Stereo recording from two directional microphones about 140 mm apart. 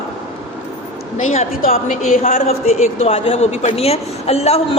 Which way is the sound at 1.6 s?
75° left (ahead or behind).